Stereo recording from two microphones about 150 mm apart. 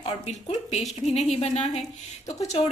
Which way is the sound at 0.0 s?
45° left (ahead or behind).